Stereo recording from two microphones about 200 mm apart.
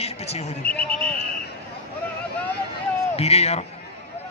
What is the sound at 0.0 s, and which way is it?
Speech, 30° left (ahead or behind).